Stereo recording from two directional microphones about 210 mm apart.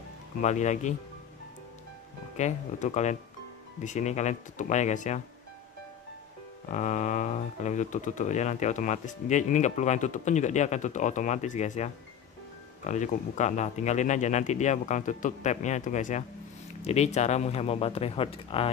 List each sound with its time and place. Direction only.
0.4 s speech: 35° left (ahead or behind)
2.3 s speech: 35° left (ahead or behind)
6.7 s speech: 35° left (ahead or behind)